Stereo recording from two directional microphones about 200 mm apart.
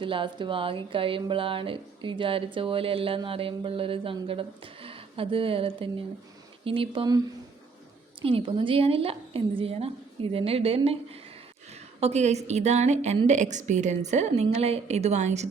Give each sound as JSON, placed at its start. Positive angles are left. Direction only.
{"t": 0.0, "sound": "speech", "side_deg": -25}
{"t": 8.2, "sound": "speech", "side_deg": -25}
{"t": 11.7, "sound": "a sound", "side_deg": -30}
{"t": 12.5, "sound": "a woman's voice", "side_deg": -35}